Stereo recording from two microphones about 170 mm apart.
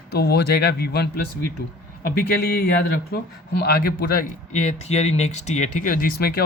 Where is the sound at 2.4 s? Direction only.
65° left (ahead or behind).